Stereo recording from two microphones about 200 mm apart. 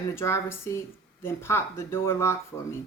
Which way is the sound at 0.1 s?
15° left (ahead or behind).